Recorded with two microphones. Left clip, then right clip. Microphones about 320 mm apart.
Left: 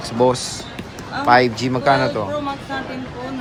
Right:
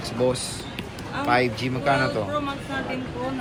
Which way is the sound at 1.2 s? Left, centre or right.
Centre.